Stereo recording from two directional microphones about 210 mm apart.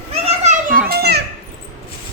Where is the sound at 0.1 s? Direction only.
30° right (ahead or behind); by 1.2 s 50° right (ahead or behind).